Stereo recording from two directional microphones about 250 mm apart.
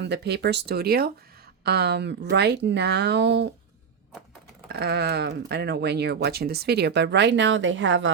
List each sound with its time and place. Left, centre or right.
0.0 s speech: right
4.7 s speech: right